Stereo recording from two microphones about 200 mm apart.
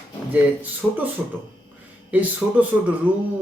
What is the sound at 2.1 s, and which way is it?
Speech, 10° right (ahead or behind).